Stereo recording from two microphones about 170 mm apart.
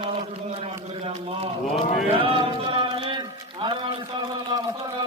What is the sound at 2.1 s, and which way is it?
Speech, 30° right (ahead or behind).